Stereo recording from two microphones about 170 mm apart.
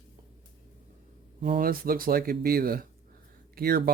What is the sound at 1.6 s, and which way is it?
Speech, 60° right (ahead or behind).